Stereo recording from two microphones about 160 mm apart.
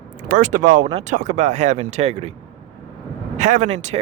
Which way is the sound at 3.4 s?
50° right (ahead or behind).